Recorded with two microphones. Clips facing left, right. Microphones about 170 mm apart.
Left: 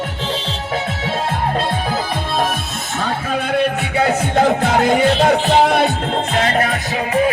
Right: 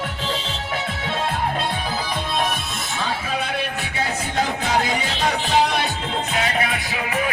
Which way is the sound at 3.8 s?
60° left (ahead or behind).